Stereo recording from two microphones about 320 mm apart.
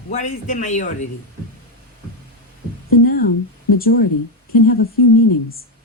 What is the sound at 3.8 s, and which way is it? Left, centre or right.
Speech, left.